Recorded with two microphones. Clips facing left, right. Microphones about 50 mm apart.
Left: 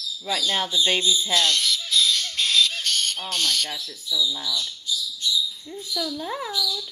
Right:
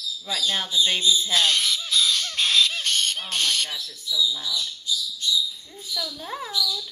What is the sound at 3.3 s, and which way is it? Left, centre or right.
Speech, right.